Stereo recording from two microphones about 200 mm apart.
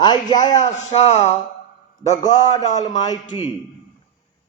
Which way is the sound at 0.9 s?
35° left (ahead or behind).